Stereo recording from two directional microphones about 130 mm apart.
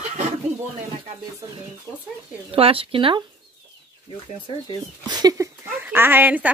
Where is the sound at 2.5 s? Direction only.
45° right (ahead or behind).